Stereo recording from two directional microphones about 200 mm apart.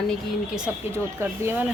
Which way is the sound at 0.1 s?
5° right (ahead or behind).